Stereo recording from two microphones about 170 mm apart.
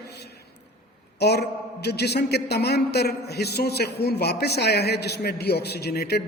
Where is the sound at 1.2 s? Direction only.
75° left (ahead or behind).